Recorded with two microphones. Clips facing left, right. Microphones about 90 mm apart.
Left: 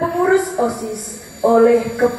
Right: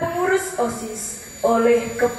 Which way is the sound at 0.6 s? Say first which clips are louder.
Left 4 dB; 15° left (ahead or behind).